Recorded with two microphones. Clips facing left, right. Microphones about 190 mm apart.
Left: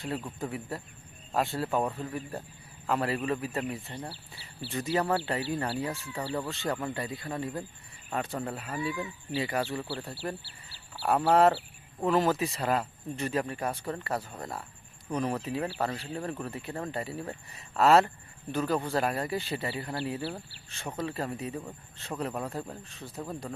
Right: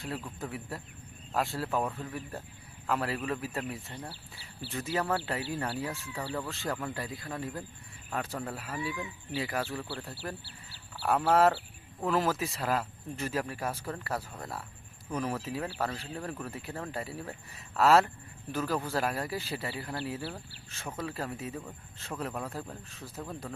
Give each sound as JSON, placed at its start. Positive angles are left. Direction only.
{"t": 0.0, "sound": "speech", "side_deg": 0}